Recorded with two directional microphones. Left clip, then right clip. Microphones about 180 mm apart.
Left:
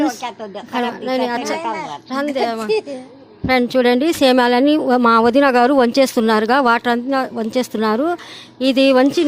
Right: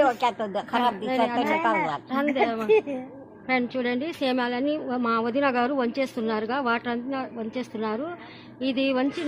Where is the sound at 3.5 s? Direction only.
50° left (ahead or behind).